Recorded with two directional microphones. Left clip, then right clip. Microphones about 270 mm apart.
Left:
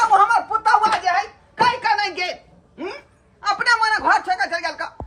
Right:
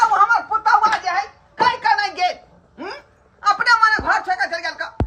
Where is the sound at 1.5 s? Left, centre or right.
Centre.